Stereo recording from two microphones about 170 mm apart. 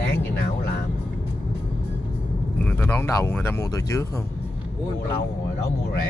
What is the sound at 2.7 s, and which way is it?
Speech, 10° left (ahead or behind).